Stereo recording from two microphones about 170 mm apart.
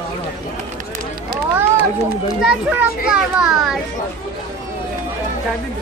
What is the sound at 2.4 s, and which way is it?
A child's voice, 5° right (ahead or behind).